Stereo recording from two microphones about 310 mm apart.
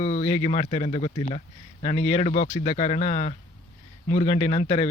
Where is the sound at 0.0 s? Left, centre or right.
Left.